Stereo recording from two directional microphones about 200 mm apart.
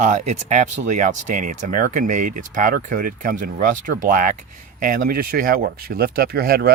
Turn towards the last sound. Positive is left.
turn(degrees=-50)  # may be behind; listen again after turning